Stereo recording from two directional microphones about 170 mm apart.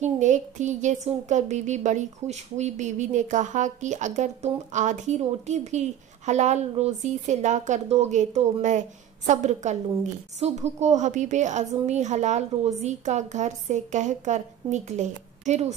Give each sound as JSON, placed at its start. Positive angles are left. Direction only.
{"t": 0.0, "sound": "speech", "side_deg": -45}